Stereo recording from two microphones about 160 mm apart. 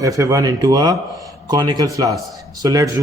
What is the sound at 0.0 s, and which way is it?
Speech, 20° right (ahead or behind).